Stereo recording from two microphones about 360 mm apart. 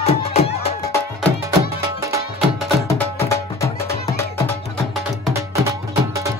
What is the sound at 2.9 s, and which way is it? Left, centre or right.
Music, centre.